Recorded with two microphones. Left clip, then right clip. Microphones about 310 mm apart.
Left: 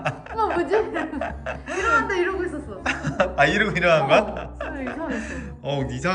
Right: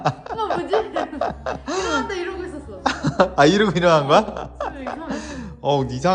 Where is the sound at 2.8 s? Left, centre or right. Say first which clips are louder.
Right 4 dB; centre.